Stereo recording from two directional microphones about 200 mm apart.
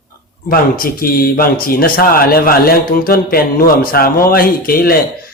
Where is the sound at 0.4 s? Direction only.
45° left (ahead or behind).